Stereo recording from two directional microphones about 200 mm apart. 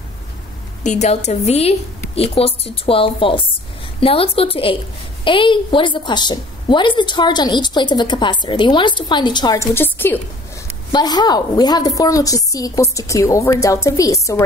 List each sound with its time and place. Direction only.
0.8 s a woman's voice: 35° left (ahead or behind); by 14.4 s 15° left (ahead or behind)